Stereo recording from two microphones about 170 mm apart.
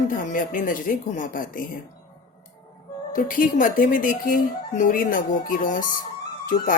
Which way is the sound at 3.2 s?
55° left (ahead or behind).